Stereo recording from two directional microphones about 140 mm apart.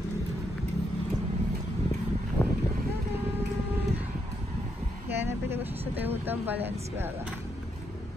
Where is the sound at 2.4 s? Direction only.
15° left (ahead or behind).